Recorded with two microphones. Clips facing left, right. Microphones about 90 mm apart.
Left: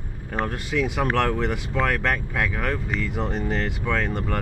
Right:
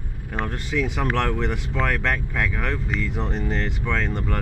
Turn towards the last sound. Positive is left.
turn(degrees=5)  # may be behind; listen again after turning